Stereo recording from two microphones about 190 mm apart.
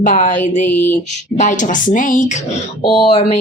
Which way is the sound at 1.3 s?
40° left (ahead or behind).